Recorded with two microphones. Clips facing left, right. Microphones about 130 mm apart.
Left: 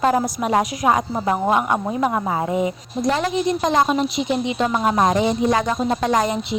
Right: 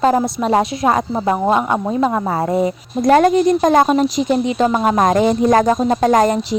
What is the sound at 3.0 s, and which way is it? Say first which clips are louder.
Speech: right 9 dB; 50° right (ahead or behind).